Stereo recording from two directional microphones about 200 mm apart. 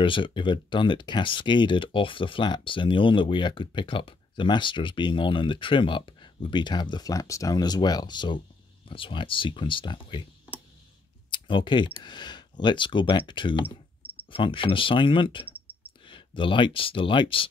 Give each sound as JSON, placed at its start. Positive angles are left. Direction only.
{"t": 0.0, "sound": "speech", "side_deg": 25}
{"t": 11.2, "sound": "speech", "side_deg": 25}